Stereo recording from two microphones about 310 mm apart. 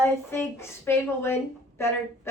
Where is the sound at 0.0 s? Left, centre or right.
Centre.